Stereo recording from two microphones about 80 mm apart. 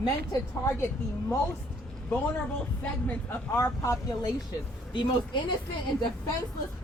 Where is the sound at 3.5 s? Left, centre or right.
Left.